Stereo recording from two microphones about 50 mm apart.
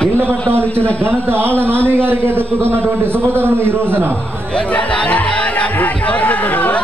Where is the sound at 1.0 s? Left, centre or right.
Right.